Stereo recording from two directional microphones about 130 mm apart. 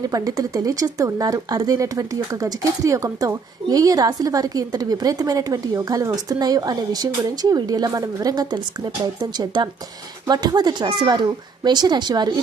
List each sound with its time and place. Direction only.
0.1 s speech: 25° right (ahead or behind)